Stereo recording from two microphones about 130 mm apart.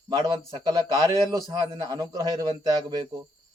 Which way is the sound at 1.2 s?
30° right (ahead or behind).